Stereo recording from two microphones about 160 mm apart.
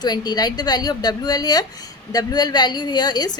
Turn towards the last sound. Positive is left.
turn(degrees=25)  # may be behind; listen again after turning